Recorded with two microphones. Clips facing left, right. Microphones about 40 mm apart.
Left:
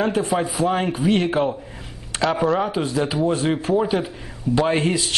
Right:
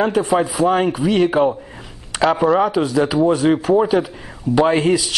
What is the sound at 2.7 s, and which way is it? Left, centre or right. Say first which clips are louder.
Speech: right 5 dB; right.